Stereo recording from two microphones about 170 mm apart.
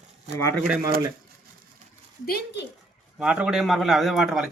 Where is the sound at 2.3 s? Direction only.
65° left (ahead or behind).